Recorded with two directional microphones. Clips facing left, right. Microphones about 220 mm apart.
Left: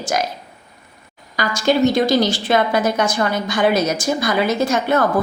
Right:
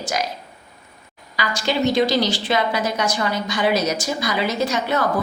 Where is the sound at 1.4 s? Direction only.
45° left (ahead or behind).